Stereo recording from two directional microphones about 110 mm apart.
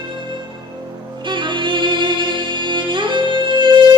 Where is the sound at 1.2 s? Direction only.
45° right (ahead or behind).